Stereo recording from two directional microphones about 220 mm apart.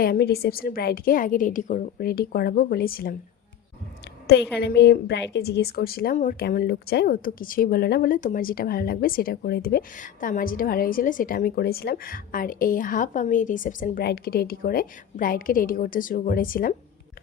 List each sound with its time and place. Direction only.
0.0 s a woman's voice: 45° left (ahead or behind)
4.5 s a woman's voice: 50° left (ahead or behind)